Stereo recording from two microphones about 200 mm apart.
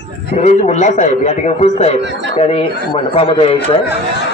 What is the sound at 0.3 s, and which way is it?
A man's voice, 35° left (ahead or behind).